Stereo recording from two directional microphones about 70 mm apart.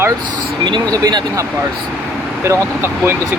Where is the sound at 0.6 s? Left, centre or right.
Right.